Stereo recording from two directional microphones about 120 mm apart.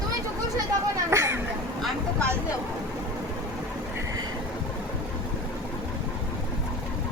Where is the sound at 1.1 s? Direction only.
25° right (ahead or behind).